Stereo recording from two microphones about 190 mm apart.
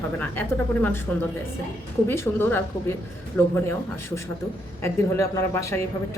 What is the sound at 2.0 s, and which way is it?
Speech, 10° left (ahead or behind).